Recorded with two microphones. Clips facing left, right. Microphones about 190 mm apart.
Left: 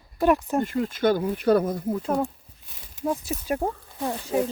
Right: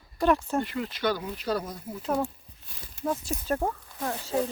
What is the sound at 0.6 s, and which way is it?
Speech, 45° left (ahead or behind).